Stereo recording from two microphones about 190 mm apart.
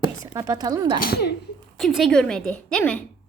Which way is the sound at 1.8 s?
Centre (ahead or behind).